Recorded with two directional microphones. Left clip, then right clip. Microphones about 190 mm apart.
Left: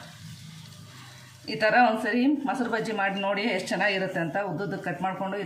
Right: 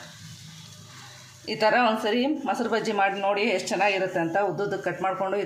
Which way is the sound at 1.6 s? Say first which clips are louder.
Even; 35° right (ahead or behind).